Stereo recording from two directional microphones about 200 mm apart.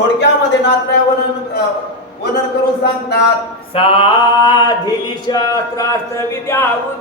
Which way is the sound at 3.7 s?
25° left (ahead or behind).